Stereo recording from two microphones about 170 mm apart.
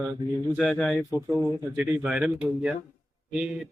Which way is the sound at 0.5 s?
Centre (ahead or behind).